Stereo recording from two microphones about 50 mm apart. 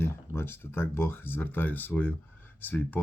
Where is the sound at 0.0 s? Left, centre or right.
Left.